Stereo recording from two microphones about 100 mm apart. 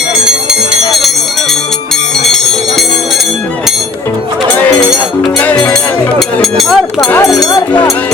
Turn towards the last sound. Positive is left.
turn(degrees=0)  # may be behind; listen again after turning